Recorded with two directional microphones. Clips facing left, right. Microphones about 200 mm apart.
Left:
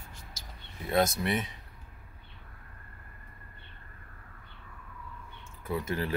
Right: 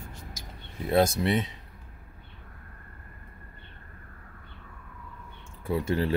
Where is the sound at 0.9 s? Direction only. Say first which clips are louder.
Right 4 dB; 30° right (ahead or behind).